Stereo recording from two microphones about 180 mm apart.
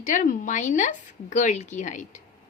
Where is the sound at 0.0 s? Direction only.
45° left (ahead or behind).